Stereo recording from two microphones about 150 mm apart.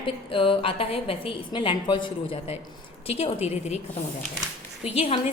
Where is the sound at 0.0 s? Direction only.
35° left (ahead or behind).